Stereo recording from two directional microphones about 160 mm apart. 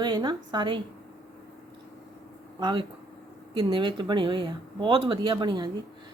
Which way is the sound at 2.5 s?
30° right (ahead or behind).